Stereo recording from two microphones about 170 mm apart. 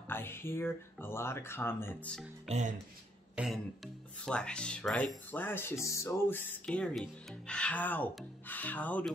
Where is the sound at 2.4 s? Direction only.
45° right (ahead or behind).